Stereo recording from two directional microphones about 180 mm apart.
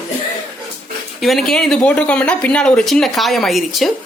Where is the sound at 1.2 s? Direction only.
Centre (ahead or behind).